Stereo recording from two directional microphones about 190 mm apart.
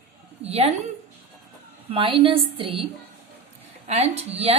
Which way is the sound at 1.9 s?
30° right (ahead or behind).